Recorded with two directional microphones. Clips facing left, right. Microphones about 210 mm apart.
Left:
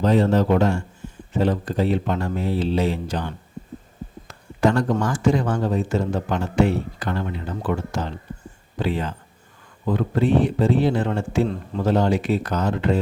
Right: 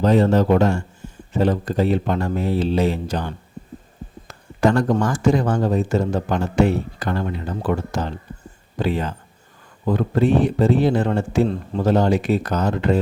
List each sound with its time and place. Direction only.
0.0 s speech: 45° right (ahead or behind)
4.6 s a man's voice: 45° right (ahead or behind)